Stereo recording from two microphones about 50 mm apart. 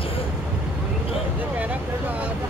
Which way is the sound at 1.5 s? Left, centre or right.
Right.